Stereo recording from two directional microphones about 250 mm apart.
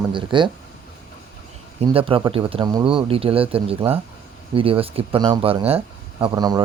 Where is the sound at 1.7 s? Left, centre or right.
Right.